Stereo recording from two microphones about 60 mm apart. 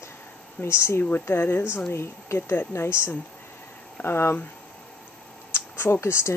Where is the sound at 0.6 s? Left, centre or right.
Left.